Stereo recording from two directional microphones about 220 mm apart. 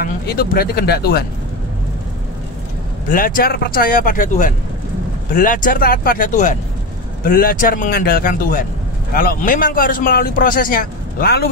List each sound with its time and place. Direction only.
0.0 s speech: 45° left (ahead or behind)
3.1 s a man's voice: 40° left (ahead or behind)